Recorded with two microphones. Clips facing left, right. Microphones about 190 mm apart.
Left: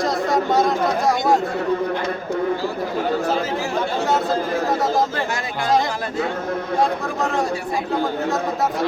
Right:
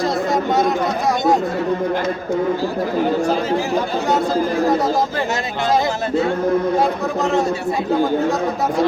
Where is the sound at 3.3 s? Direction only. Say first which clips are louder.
Right 4 dB; centre (ahead or behind).